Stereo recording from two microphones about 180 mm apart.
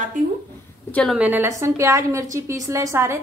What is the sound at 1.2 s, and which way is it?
A woman's voice, 10° right (ahead or behind).